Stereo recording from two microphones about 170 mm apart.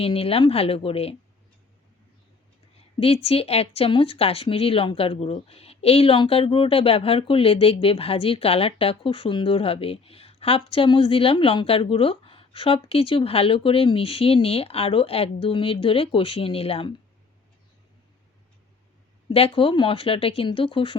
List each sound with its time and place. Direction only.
0.0 s speech: 35° left (ahead or behind)
3.0 s speech: 35° left (ahead or behind)
19.3 s speech: 35° left (ahead or behind)